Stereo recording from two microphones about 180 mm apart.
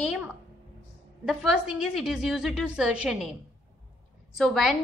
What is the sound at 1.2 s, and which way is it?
A woman's voice, 5° right (ahead or behind).